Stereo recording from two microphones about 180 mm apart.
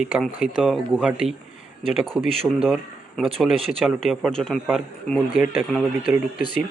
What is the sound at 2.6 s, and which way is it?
Speech, centre (ahead or behind).